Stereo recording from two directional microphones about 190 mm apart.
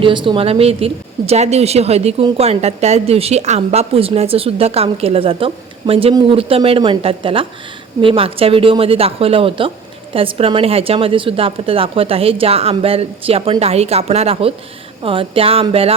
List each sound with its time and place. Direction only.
0.0 s speech: 25° right (ahead or behind)